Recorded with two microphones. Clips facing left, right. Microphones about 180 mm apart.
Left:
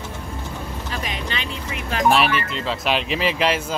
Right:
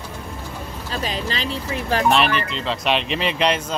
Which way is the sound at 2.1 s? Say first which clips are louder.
Even; 5° left (ahead or behind).